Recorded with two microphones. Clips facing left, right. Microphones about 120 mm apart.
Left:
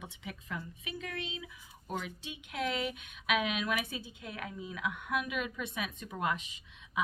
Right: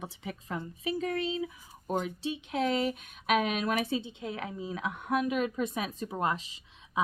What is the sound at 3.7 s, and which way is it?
A woman's voice, 30° right (ahead or behind).